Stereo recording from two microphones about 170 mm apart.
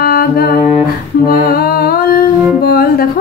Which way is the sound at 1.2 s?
60° left (ahead or behind).